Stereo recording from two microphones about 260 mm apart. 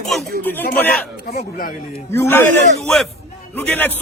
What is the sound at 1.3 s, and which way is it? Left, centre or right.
Speech, left.